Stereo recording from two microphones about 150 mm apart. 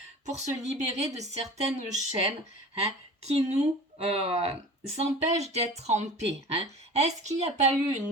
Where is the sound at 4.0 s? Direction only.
40° right (ahead or behind).